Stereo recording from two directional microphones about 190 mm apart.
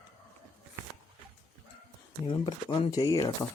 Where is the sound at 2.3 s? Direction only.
25° left (ahead or behind).